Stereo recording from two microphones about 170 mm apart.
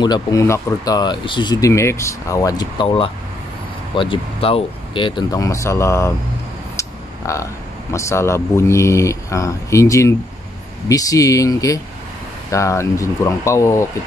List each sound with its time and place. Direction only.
0.0 s speech: 20° left (ahead or behind)
6.8 s a sound: 15° left (ahead or behind)
7.9 s speech: 15° left (ahead or behind)